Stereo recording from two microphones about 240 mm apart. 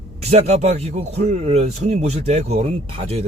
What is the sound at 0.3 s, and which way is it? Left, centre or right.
Speech, right.